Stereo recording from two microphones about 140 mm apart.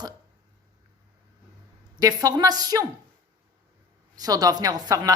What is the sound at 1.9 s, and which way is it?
Speech, 25° right (ahead or behind).